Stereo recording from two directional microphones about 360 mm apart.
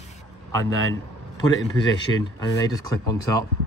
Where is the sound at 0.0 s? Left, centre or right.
Centre.